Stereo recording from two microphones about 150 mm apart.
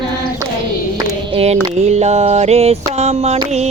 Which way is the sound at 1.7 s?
45° right (ahead or behind).